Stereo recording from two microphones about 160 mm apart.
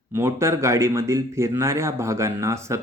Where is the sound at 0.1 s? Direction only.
15° right (ahead or behind).